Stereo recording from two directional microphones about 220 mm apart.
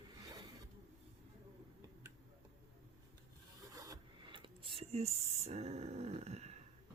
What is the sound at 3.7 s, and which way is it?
Rub, 15° right (ahead or behind).